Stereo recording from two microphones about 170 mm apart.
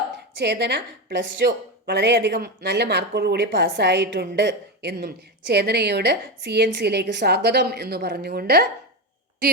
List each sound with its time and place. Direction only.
0.3 s a woman's voice: 80° right